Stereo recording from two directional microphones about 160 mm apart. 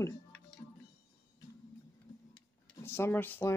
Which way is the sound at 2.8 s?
15° left (ahead or behind).